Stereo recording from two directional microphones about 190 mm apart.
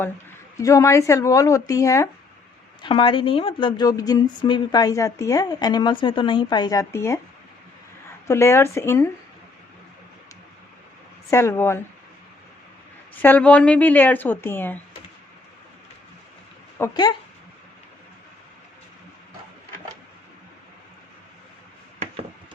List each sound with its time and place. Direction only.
0.5 s speech: 15° left (ahead or behind)
2.8 s a woman's voice: 25° left (ahead or behind)
8.3 s speech: 15° left (ahead or behind)
11.3 s speech: 15° left (ahead or behind)
13.2 s speech: 10° left (ahead or behind)
16.7 s speech: 15° left (ahead or behind)